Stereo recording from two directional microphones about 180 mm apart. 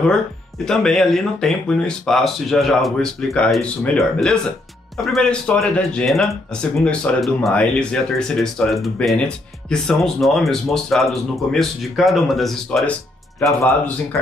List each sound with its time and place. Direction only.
0.7 s speech: 5° left (ahead or behind)